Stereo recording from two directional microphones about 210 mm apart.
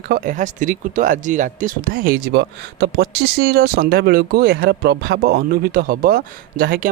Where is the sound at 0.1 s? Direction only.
35° right (ahead or behind).